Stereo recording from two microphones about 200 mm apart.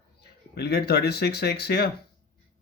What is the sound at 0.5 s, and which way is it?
Speech, 55° left (ahead or behind).